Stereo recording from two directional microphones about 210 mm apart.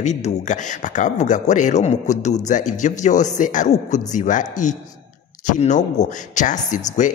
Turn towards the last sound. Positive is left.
turn(degrees=35)  # may be behind; listen again after turning